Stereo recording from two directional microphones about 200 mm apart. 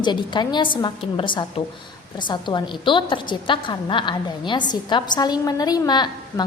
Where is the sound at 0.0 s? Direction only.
20° left (ahead or behind).